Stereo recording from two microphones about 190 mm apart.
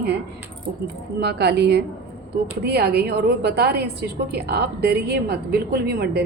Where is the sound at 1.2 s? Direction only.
60° right (ahead or behind).